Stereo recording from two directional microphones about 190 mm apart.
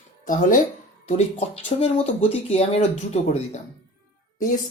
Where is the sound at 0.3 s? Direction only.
45° left (ahead or behind).